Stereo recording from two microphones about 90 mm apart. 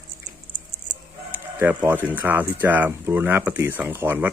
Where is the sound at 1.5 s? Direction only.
20° right (ahead or behind).